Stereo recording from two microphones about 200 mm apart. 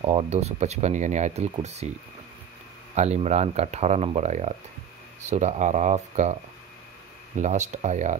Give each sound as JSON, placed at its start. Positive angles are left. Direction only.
{"t": 0.0, "sound": "speech", "side_deg": -30}
{"t": 2.9, "sound": "speech", "side_deg": -35}
{"t": 7.3, "sound": "speech", "side_deg": -35}